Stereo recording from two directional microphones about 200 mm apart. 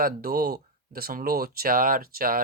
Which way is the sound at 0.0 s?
50° right (ahead or behind).